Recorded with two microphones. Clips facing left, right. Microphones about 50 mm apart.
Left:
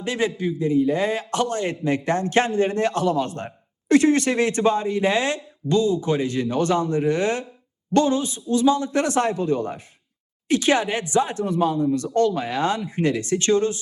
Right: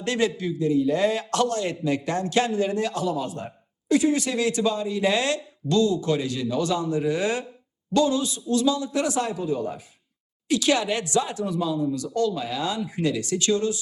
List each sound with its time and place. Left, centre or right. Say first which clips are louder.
0.0 s a man's voice: left 1 dB; centre
0.9 s a man's voice: even; centre
8.7 s speech: left 4 dB; left
10.5 s a man's voice: left 2 dB; left
11.3 s a man's voice: left 4 dB; left